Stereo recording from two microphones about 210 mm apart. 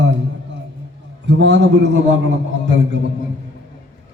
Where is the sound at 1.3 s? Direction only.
60° right (ahead or behind).